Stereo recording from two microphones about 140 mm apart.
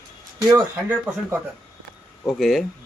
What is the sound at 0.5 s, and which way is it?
Speech, 15° right (ahead or behind).